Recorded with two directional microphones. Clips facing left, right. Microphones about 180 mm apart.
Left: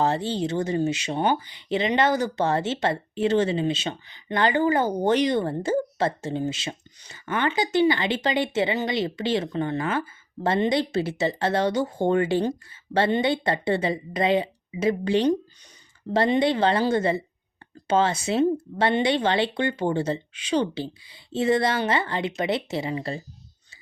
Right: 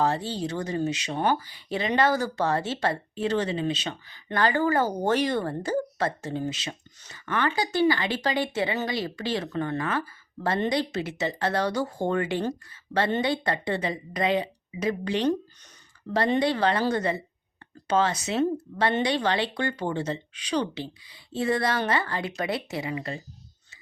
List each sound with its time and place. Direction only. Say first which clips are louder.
0.0 s speech: left 2 dB; 25° left (ahead or behind)
16.4 s speech: left 3 dB; 25° left (ahead or behind)